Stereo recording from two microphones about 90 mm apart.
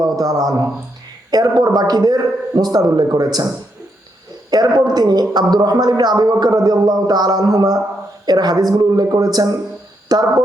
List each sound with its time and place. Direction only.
0.0 s speech: 45° right (ahead or behind)
4.5 s speech: 45° right (ahead or behind)